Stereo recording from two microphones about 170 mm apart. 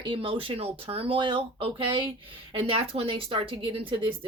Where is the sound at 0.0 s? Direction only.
30° right (ahead or behind).